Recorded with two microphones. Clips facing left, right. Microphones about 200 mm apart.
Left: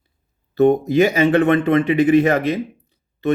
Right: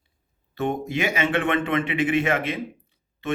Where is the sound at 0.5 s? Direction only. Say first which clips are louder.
Left 12 dB; 40° left (ahead or behind).